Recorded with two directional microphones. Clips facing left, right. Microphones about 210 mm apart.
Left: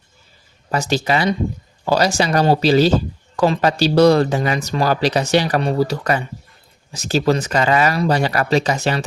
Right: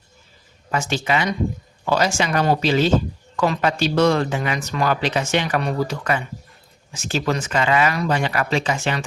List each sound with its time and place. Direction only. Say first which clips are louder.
0.7 s speech: left 3 dB; 35° left (ahead or behind)